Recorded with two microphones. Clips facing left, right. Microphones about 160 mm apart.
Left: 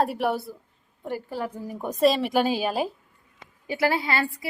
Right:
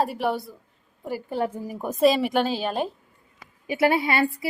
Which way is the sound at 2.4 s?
10° left (ahead or behind).